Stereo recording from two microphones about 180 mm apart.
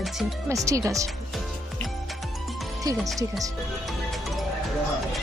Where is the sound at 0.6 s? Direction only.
15° right (ahead or behind).